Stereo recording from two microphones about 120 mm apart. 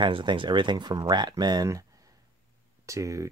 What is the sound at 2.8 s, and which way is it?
Speech, 25° right (ahead or behind).